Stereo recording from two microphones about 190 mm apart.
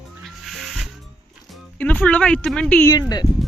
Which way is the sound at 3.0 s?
20° left (ahead or behind).